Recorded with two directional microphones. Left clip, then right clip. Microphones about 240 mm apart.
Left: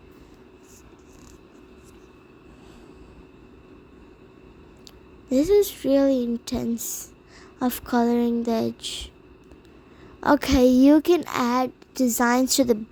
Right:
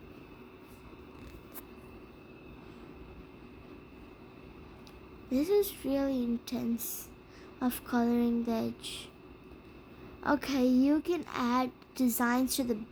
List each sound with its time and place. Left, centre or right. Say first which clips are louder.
5.3 s a child's voice: left 9 dB; left
10.2 s a child's voice: left 11 dB; left